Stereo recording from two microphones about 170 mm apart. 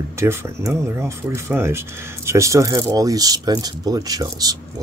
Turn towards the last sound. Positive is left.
turn(degrees=-20)  # may be behind; listen again after turning